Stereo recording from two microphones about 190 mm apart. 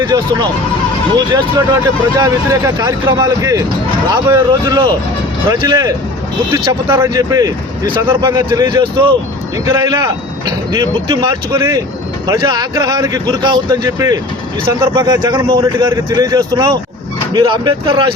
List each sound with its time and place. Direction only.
2.1 s speech: 20° right (ahead or behind)